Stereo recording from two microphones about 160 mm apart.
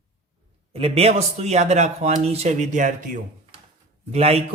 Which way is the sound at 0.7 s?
40° right (ahead or behind).